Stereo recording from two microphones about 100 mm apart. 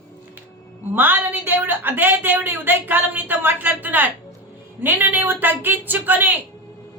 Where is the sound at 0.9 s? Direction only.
20° right (ahead or behind).